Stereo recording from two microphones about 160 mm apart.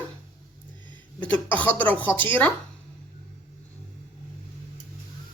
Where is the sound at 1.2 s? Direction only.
10° left (ahead or behind).